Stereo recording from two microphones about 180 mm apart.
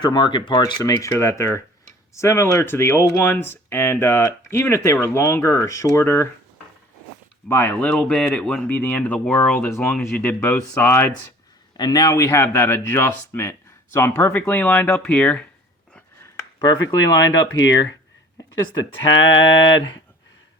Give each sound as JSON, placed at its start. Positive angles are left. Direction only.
{"t": 0.0, "sound": "speech", "side_deg": 25}
{"t": 7.4, "sound": "speech", "side_deg": 10}
{"t": 16.6, "sound": "speech", "side_deg": 20}
{"t": 19.7, "sound": "speech", "side_deg": 25}